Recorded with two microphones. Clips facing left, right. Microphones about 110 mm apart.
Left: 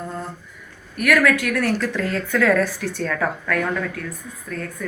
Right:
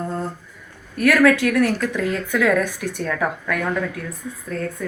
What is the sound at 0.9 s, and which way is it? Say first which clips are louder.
Speech: right 3 dB; 30° right (ahead or behind).